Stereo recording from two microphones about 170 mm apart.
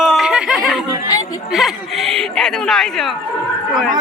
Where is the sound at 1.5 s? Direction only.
Centre (ahead or behind).